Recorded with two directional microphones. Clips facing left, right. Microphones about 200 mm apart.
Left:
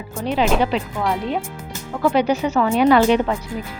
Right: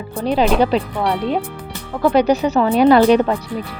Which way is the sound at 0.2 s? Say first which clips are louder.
Right 3 dB; 35° right (ahead or behind).